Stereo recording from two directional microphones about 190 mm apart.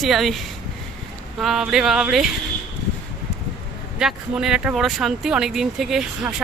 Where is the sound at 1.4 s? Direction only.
Centre (ahead or behind).